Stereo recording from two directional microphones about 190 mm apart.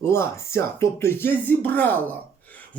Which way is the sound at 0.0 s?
15° left (ahead or behind).